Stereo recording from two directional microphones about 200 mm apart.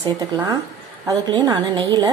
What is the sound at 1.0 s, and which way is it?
A woman's voice, 20° right (ahead or behind).